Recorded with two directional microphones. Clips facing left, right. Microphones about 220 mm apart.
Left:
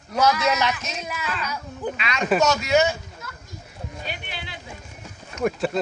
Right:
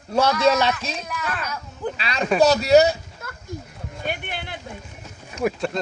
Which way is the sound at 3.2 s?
55° right (ahead or behind).